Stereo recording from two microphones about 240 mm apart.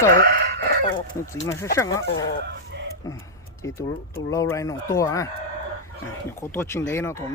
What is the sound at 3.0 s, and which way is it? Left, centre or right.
Speech, centre.